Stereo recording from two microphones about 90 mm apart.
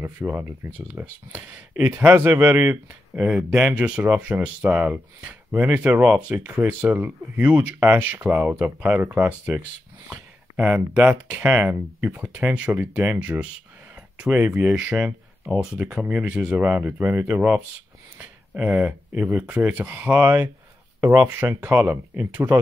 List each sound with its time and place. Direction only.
0.0 s speech: 25° right (ahead or behind)
15.4 s speech: centre (ahead or behind); by 20.4 s 20° right (ahead or behind)
21.0 s speech: 45° right (ahead or behind)
21.4 s speech: 20° right (ahead or behind)